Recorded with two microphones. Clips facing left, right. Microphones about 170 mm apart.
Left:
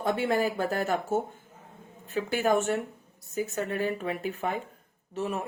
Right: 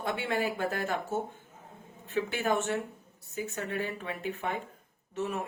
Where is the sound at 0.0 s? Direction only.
40° left (ahead or behind).